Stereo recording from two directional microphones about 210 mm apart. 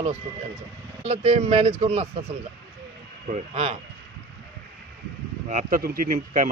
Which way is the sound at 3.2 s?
30° right (ahead or behind).